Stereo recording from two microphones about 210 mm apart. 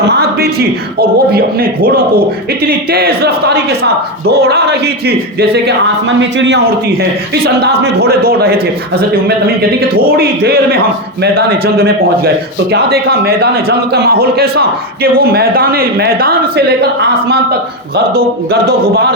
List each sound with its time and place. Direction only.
0.1 s a man's voice: 50° right (ahead or behind)